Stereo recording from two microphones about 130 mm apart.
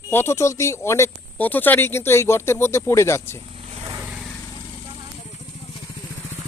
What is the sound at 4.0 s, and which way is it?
Vehicle, 5° right (ahead or behind).